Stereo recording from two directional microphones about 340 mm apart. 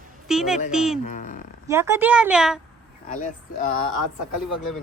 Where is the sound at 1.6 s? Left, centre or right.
Centre.